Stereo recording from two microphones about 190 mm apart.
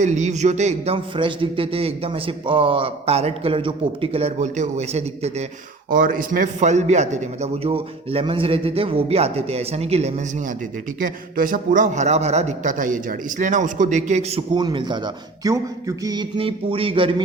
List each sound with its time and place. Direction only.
0.0 s a man's voice: 40° right (ahead or behind)
5.9 s a man's voice: 45° right (ahead or behind)
11.0 s a man's voice: 45° right (ahead or behind); by 17.2 s 25° right (ahead or behind)